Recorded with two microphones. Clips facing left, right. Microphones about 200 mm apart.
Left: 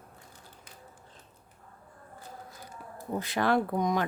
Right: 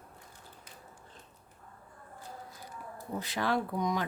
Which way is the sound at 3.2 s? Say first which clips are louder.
Left 5 dB; 55° left (ahead or behind).